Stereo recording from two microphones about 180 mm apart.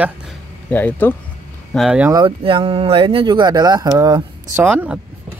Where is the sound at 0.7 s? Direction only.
10° left (ahead or behind).